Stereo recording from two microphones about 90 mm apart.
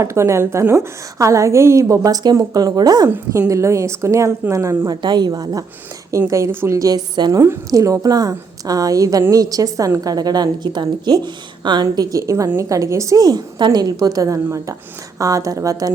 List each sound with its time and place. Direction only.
0.0 s a woman's voice: 35° right (ahead or behind)
3.3 s a woman's voice: 35° right (ahead or behind)
4.9 s a woman's voice: 50° right (ahead or behind)
6.1 s a woman's voice: 35° right (ahead or behind)
6.7 s a woman's voice: 45° right (ahead or behind)
7.3 s a woman's voice: 30° right (ahead or behind)
7.7 s a woman's voice: 40° right (ahead or behind)